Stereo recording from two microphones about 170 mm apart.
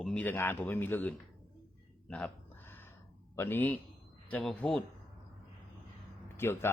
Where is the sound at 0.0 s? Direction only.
5° left (ahead or behind).